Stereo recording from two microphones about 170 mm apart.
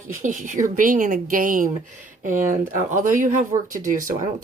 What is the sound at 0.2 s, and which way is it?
Speech, 50° right (ahead or behind).